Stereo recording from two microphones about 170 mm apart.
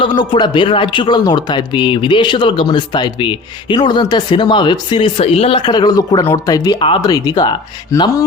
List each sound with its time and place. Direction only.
0.0 s speech: 25° left (ahead or behind)